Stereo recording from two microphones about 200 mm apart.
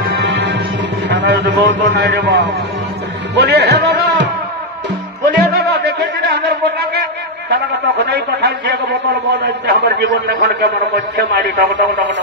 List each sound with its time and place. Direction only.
0.0 s music: 60° right (ahead or behind)
1.0 s a man's voice: 60° right (ahead or behind)
5.2 s music: 55° right (ahead or behind)
7.4 s a man's voice: 60° right (ahead or behind)